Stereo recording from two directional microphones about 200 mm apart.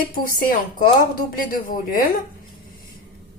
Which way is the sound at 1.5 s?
45° left (ahead or behind).